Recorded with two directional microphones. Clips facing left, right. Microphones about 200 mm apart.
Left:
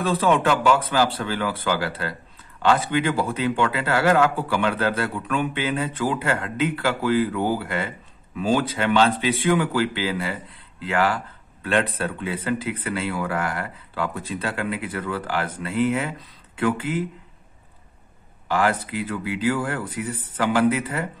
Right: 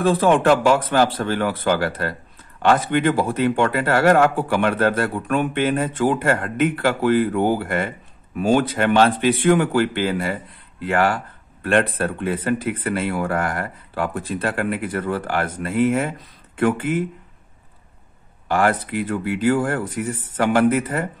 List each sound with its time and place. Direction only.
0.0 s speech: 50° right (ahead or behind)
18.5 s speech: 50° right (ahead or behind)